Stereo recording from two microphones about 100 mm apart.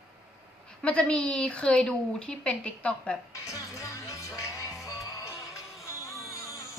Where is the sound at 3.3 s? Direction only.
30° left (ahead or behind).